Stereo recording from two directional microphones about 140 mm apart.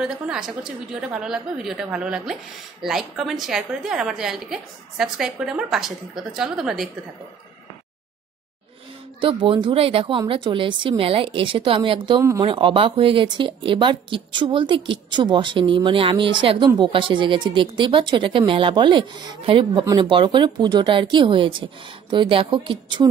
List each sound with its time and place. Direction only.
0.0 s a woman's voice: 5° right (ahead or behind)
9.2 s speech: 40° right (ahead or behind)